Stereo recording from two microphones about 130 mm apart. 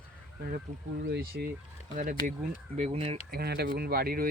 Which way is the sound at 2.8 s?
50° right (ahead or behind).